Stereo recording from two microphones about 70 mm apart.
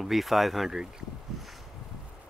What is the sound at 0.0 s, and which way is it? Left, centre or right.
Speech, centre.